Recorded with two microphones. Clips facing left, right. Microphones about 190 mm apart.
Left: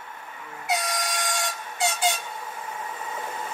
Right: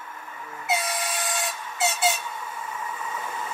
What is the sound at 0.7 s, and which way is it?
Train, 5° right (ahead or behind).